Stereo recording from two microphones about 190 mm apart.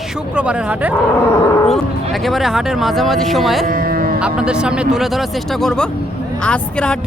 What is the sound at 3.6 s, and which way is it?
Music, 50° right (ahead or behind).